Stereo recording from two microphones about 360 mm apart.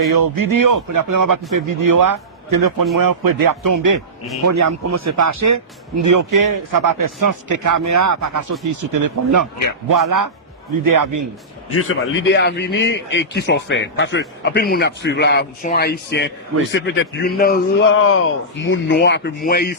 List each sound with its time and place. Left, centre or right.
0.1 s a man's voice: right
11.8 s a man's voice: left